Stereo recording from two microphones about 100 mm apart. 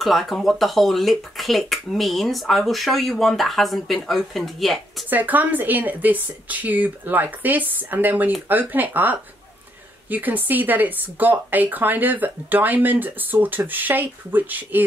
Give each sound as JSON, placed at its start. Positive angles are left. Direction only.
{"t": 0.0, "sound": "speech", "side_deg": 0}
{"t": 5.1, "sound": "speech", "side_deg": -15}